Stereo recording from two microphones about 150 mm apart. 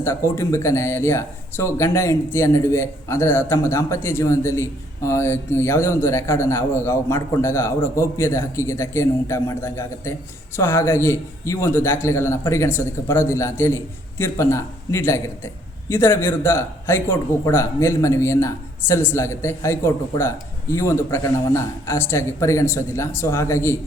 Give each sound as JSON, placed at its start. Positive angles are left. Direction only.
{"t": 0.0, "sound": "speech", "side_deg": 20}